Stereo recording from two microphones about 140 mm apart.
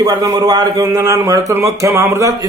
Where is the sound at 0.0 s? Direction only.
25° right (ahead or behind).